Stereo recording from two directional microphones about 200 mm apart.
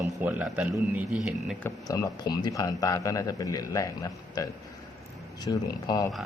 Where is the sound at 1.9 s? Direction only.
20° left (ahead or behind).